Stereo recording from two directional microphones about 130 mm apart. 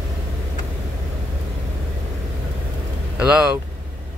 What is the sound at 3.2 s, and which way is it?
Speech, 10° right (ahead or behind).